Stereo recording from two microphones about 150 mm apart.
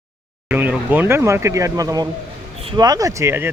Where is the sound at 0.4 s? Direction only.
10° right (ahead or behind).